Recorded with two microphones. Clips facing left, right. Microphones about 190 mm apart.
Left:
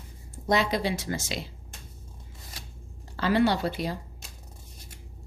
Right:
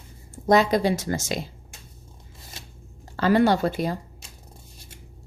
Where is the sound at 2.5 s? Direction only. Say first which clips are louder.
Right 2 dB; 25° right (ahead or behind).